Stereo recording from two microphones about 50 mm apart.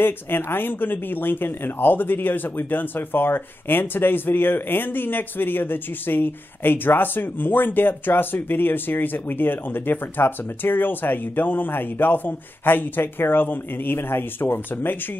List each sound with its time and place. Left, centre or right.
0.0 s speech: left